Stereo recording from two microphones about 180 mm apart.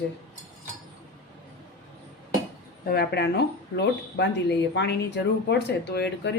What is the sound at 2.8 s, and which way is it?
Speech, 60° left (ahead or behind).